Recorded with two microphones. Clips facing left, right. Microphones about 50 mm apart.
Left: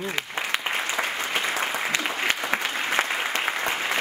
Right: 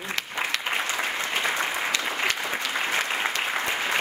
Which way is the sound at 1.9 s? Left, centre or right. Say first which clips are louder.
Left 1 dB; left.